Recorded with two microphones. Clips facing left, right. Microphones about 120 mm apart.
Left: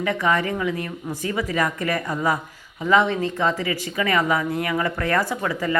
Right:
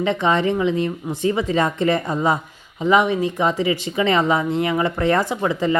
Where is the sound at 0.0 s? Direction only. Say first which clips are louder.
Right 3 dB; 20° right (ahead or behind).